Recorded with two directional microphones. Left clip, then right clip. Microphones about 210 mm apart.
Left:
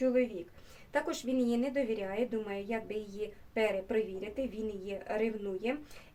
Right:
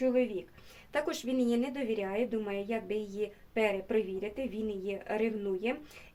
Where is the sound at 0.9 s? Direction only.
25° right (ahead or behind).